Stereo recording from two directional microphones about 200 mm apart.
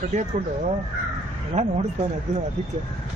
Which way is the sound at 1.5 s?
30° right (ahead or behind).